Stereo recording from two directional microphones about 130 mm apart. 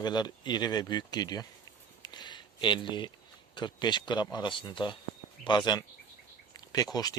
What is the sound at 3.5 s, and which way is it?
Speech, 35° left (ahead or behind).